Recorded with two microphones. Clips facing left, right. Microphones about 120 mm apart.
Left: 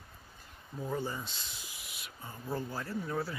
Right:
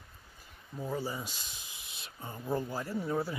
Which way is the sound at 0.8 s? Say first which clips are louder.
Even; 5° right (ahead or behind).